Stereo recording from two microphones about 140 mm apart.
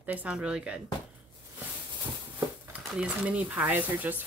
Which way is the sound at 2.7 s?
5° right (ahead or behind).